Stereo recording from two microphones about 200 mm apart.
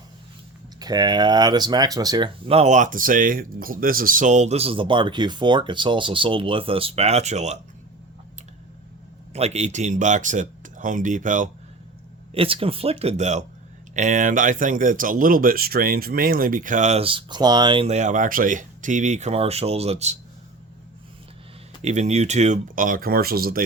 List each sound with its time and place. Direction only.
0.8 s speech: 20° right (ahead or behind)
9.3 s speech: 35° right (ahead or behind)
12.3 s speech: 30° right (ahead or behind)
21.8 s speech: 35° right (ahead or behind)